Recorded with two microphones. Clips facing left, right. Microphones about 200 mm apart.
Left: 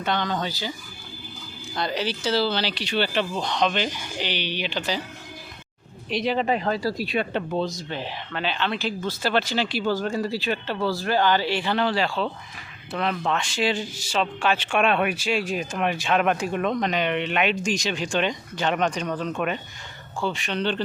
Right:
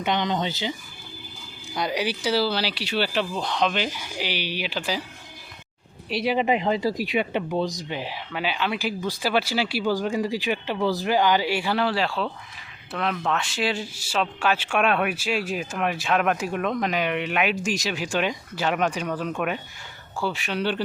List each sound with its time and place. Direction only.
0.0 s speech: 20° right (ahead or behind)
1.7 s speech: 10° right (ahead or behind)
6.1 s speech: 10° right (ahead or behind)